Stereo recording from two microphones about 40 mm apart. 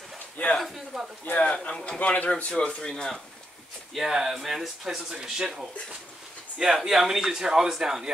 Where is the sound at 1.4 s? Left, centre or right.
Left.